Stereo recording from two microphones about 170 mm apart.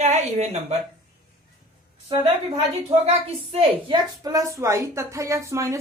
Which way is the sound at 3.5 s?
25° right (ahead or behind).